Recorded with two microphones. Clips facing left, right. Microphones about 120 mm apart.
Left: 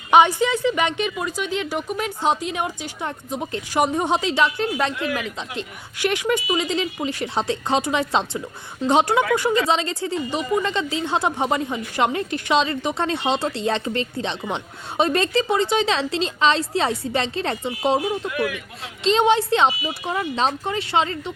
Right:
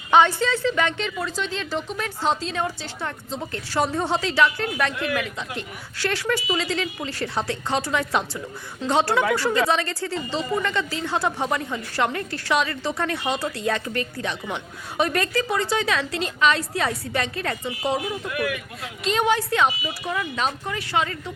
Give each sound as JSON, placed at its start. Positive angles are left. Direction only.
{"t": 0.1, "sound": "a woman's voice", "side_deg": 15}